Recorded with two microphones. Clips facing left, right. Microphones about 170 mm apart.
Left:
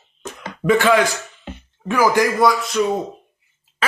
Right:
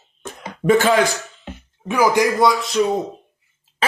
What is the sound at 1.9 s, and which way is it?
Speech, 15° right (ahead or behind).